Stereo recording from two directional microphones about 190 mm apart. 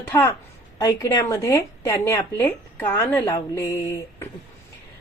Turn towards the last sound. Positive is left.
turn(degrees=15)  # may be behind; listen again after turning